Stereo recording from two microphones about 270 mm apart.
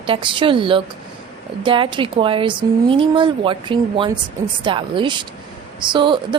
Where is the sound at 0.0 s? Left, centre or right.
Centre.